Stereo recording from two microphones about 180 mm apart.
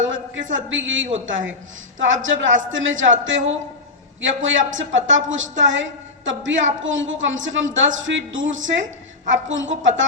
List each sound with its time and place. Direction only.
0.0 s a woman's voice: 90° right